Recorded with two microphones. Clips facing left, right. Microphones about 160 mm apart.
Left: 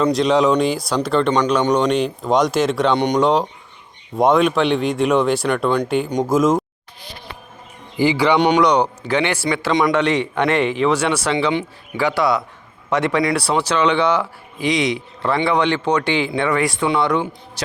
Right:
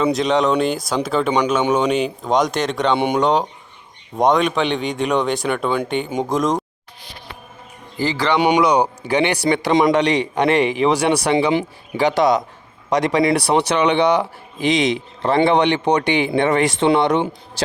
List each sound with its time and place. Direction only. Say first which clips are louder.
0.0 s speech: left 2 dB; centre (ahead or behind)
7.9 s speech: left 4 dB; 10° left (ahead or behind)
8.4 s a man's voice: right 3 dB; 10° right (ahead or behind)